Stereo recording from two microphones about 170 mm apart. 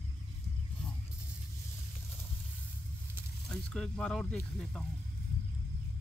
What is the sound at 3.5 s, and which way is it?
Speech, 5° left (ahead or behind).